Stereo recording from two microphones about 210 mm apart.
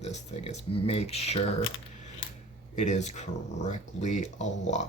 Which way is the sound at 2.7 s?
35° left (ahead or behind).